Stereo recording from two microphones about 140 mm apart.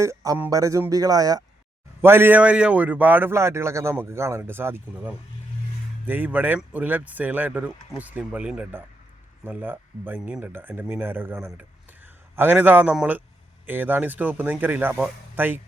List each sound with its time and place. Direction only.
0.0 s a man's voice: 20° right (ahead or behind)